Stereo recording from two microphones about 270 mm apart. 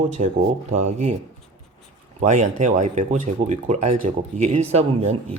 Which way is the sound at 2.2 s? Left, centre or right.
Right.